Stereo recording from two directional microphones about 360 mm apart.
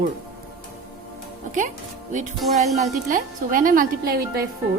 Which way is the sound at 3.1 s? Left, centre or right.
Right.